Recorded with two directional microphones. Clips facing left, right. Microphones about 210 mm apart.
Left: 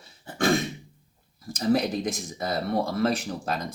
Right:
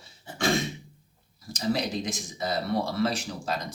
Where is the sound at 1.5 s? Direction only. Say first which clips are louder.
Left 4 dB; 55° left (ahead or behind).